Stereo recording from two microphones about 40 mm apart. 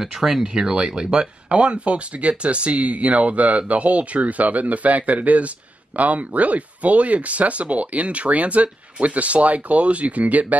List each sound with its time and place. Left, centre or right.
0.0 s speech: centre; by 10.4 s right